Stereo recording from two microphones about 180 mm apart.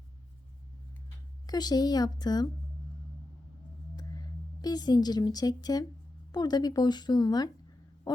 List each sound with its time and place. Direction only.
1.5 s speech: 20° left (ahead or behind)
3.9 s a woman's voice: 20° left (ahead or behind)